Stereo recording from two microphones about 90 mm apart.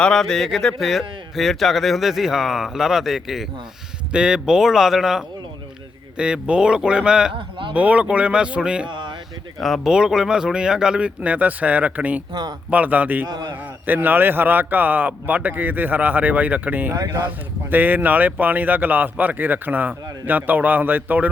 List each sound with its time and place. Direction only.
0.0 s a man's voice: 5° left (ahead or behind); by 8.9 s 10° right (ahead or behind)
8.9 s a sound: 60° right (ahead or behind)
9.6 s speech: centre (ahead or behind); by 12.2 s 15° right (ahead or behind)
12.3 s a man's voice: 50° right (ahead or behind)
12.7 s speech: 15° right (ahead or behind)
13.2 s a man's voice: 50° right (ahead or behind)
13.8 s speech: 20° right (ahead or behind)
16.9 s speech: 40° right (ahead or behind)
17.2 s speech: 20° right (ahead or behind)